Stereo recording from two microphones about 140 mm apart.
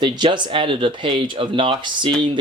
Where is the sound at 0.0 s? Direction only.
35° right (ahead or behind).